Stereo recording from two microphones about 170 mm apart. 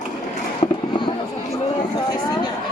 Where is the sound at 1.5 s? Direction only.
25° left (ahead or behind).